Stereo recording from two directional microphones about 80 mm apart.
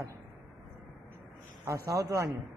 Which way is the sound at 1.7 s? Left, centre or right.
Right.